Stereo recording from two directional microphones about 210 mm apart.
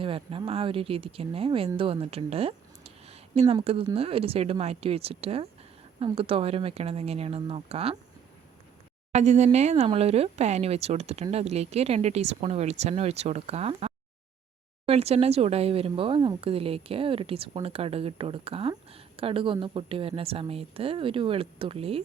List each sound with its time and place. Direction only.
0.0 s speech: 25° right (ahead or behind)
9.1 s speech: 35° right (ahead or behind)